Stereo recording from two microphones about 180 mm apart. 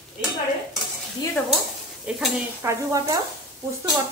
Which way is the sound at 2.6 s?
15° right (ahead or behind).